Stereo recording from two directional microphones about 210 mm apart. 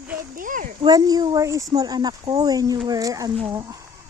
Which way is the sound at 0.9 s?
15° right (ahead or behind).